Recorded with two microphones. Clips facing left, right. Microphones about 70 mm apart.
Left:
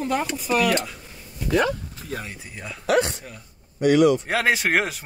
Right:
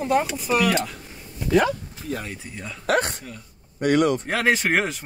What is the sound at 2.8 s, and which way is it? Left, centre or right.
Speech, right.